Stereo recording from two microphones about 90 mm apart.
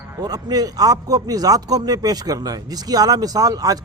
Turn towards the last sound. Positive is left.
turn(degrees=-45)  # may be behind; listen again after turning